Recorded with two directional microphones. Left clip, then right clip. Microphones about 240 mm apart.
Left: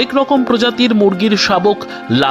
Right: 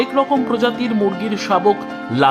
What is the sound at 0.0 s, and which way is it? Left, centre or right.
Speech, centre.